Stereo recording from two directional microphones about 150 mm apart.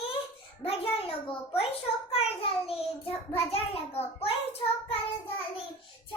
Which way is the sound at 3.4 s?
40° left (ahead or behind).